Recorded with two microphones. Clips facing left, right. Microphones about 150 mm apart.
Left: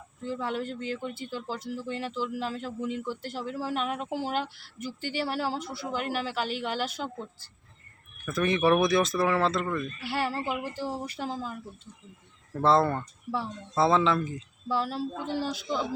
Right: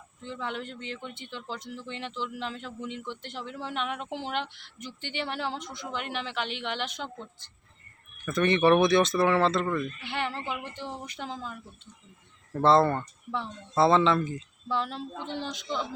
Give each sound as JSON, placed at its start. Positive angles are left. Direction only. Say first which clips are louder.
{"t": 0.2, "sound": "speech", "louder": "left 5 dB", "side_deg": 5}
{"t": 0.4, "sound": "speech", "louder": "left 3 dB", "side_deg": 40}
{"t": 0.9, "sound": "speech", "louder": "left 5 dB", "side_deg": 5}
{"t": 2.5, "sound": "speech", "louder": "left 4 dB", "side_deg": 40}
{"t": 3.1, "sound": "speech", "louder": "left 4 dB", "side_deg": 5}
{"t": 3.8, "sound": "speech", "louder": "left 2 dB", "side_deg": 40}
{"t": 4.4, "sound": "speech", "louder": "left 2 dB", "side_deg": 5}
{"t": 5.9, "sound": "speech", "louder": "left 3 dB", "side_deg": 40}
{"t": 6.7, "sound": "speech", "louder": "left 3 dB", "side_deg": 5}
{"t": 12.5, "sound": "speech", "louder": "right 2 dB", "side_deg": 0}